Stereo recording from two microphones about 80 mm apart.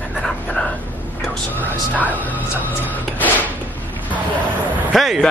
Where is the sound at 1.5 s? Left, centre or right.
Left.